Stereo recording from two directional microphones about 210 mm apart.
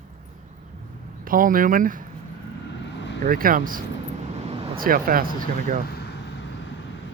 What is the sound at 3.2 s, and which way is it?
Speech, 40° right (ahead or behind).